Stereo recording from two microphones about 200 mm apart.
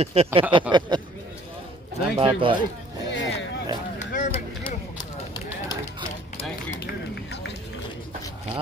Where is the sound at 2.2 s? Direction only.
25° right (ahead or behind).